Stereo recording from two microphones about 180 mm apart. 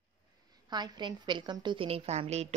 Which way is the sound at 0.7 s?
25° right (ahead or behind).